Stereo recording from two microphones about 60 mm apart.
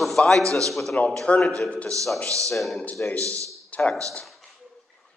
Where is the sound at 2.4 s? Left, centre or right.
Centre.